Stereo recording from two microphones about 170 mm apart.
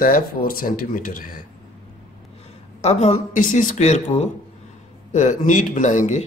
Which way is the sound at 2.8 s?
40° left (ahead or behind).